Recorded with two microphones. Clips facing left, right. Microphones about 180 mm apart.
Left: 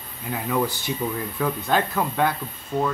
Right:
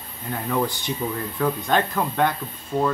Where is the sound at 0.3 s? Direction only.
5° left (ahead or behind).